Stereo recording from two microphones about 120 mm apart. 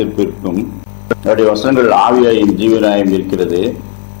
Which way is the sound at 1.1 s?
30° left (ahead or behind).